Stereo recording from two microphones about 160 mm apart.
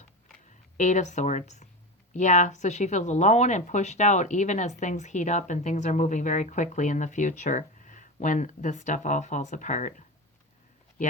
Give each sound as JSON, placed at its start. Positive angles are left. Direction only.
{"t": 0.8, "sound": "speech", "side_deg": 50}